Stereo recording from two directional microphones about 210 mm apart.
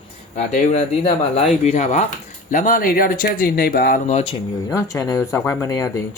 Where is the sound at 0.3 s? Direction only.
35° left (ahead or behind).